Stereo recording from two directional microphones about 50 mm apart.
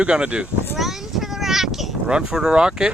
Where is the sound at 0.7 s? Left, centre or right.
Centre.